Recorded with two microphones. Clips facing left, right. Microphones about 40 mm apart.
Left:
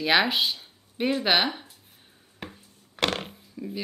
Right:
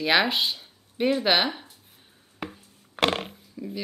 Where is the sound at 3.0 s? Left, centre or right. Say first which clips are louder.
Right 3 dB; right.